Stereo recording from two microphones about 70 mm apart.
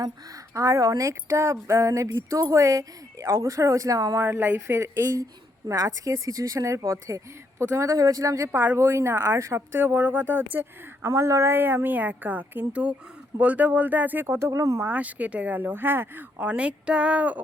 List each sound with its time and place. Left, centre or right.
0.0 s speech: right
4.7 s a woman's voice: right
5.2 s speech: right
8.5 s a woman's voice: right
9.4 s speech: right
9.7 s speech: right
11.0 s speech: right
11.5 s speech: right
14.5 s speech: right
14.8 s speech: right
16.5 s speech: centre